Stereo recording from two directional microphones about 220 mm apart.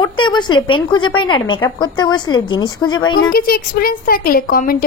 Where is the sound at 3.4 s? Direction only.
40° left (ahead or behind).